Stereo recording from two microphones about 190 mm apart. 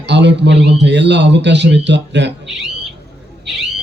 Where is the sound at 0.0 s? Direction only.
65° right (ahead or behind).